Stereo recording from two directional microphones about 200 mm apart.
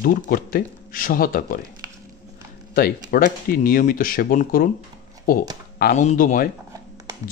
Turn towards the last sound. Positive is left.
turn(degrees=40)  # may be behind; listen again after turning